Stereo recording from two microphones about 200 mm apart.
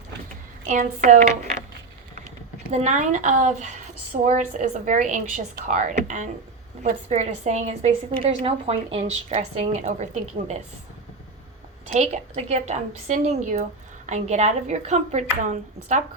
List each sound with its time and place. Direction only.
0.6 s a woman's voice: 40° right (ahead or behind)
2.7 s a woman's voice: 35° right (ahead or behind)
11.9 s a woman's voice: 35° right (ahead or behind)